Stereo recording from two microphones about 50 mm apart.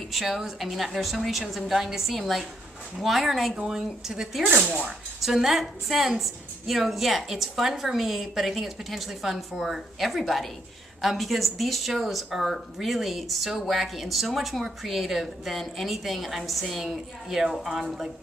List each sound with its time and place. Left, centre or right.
0.1 s speech: centre
4.5 s speech: right
4.8 s speech: centre